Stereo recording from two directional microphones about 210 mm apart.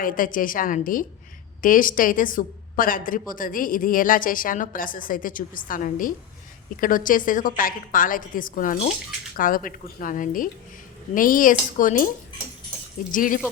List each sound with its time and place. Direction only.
0.0 s a woman's voice: 40° left (ahead or behind)